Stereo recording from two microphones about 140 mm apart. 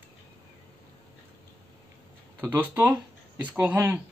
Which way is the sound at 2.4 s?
20° right (ahead or behind).